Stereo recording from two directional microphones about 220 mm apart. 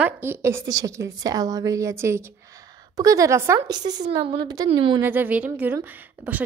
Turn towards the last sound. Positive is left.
turn(degrees=-10)  # may be behind; listen again after turning